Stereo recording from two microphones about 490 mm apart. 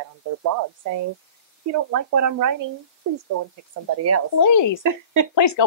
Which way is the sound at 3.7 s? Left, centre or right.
Right.